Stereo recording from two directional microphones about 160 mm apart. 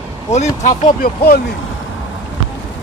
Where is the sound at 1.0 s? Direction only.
65° left (ahead or behind).